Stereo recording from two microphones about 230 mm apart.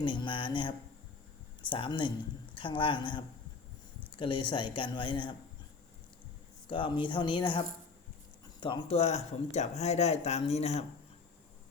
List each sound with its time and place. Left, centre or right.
0.0 s speech: left
1.7 s speech: left
6.7 s speech: left
8.6 s speech: left